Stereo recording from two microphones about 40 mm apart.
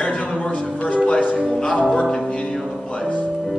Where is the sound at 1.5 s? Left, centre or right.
Left.